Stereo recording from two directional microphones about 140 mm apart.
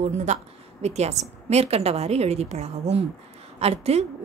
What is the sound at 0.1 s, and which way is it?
A woman's voice, 55° right (ahead or behind).